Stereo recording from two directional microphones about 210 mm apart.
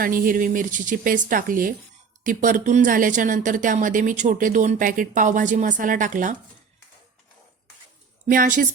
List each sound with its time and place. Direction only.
0.0 s speech: 40° right (ahead or behind)
8.3 s speech: 40° right (ahead or behind)